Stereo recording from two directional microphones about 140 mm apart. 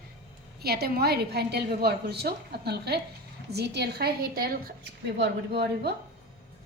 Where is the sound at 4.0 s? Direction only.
90° right.